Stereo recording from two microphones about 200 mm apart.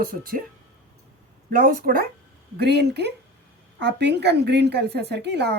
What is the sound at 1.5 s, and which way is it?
Speech, 45° right (ahead or behind).